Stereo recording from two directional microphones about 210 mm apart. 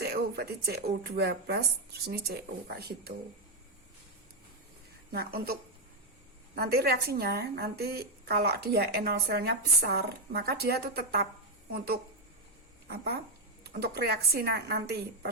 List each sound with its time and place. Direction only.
0.0 s a woman's voice: 50° right (ahead or behind)
5.1 s a woman's voice: 50° right (ahead or behind)
6.6 s a woman's voice: 50° right (ahead or behind)
13.7 s a woman's voice: 50° right (ahead or behind)